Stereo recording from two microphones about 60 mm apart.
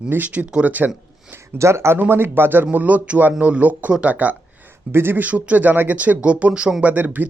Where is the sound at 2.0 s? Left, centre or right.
Right.